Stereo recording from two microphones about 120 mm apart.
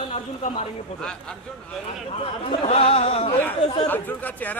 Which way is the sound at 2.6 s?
60° left (ahead or behind).